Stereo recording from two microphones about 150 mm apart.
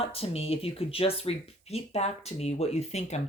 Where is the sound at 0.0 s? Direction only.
40° left (ahead or behind).